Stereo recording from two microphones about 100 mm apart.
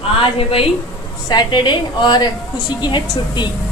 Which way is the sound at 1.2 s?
45° left (ahead or behind).